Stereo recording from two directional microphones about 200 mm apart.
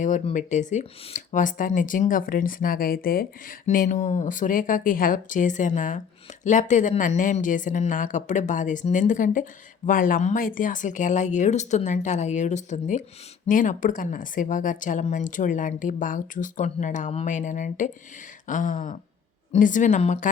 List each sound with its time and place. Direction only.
0.0 s speech: 40° left (ahead or behind)